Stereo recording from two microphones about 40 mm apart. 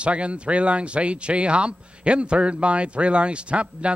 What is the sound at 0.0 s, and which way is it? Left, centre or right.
Speech, right.